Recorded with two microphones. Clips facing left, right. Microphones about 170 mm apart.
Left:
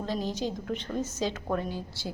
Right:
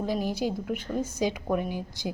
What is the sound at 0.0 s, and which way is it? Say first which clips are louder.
Speech: right 3 dB; 10° right (ahead or behind).